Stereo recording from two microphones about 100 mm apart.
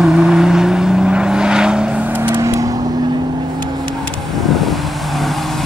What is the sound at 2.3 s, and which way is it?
Vehicle, 35° right (ahead or behind).